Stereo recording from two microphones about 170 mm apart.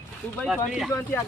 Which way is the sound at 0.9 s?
15° left (ahead or behind).